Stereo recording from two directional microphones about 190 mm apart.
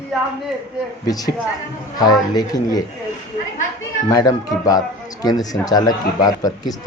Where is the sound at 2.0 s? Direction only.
20° left (ahead or behind).